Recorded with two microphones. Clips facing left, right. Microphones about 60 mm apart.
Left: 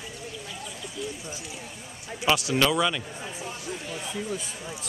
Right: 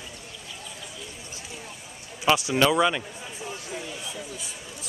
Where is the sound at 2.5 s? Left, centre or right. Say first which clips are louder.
Right 2 dB; centre.